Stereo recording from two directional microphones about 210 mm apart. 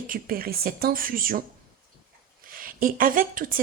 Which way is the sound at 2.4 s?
40° right (ahead or behind).